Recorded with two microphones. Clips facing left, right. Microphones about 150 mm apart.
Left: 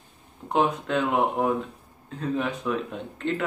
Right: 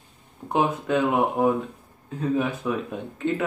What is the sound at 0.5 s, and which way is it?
Speech, 10° right (ahead or behind).